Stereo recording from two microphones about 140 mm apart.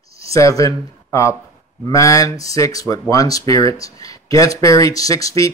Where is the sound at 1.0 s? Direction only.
20° left (ahead or behind).